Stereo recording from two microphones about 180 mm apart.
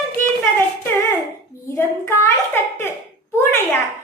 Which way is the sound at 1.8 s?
15° left (ahead or behind).